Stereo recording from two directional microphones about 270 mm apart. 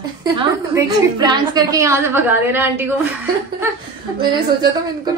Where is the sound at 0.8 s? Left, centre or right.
Centre.